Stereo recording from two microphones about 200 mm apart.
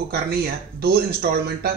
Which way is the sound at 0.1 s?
50° right (ahead or behind).